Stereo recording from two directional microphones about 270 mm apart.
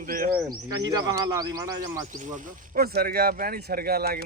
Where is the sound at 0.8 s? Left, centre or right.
Centre.